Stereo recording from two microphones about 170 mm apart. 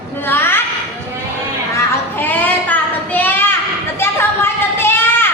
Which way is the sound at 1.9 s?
10° left (ahead or behind).